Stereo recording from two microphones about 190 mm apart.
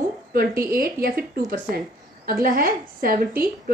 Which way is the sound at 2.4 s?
45° right (ahead or behind).